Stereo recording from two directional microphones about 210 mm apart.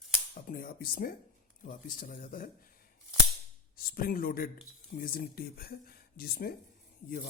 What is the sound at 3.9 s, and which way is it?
Speech, 45° left (ahead or behind).